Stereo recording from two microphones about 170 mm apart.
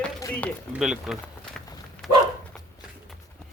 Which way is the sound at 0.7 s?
5° right (ahead or behind).